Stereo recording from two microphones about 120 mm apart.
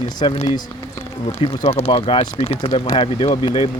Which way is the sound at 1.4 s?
60° left (ahead or behind).